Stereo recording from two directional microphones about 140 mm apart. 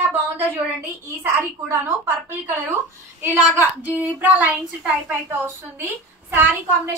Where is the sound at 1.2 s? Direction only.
20° right (ahead or behind).